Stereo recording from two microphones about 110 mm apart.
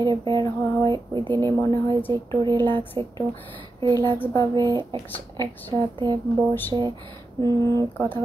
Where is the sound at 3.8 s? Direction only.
35° right (ahead or behind).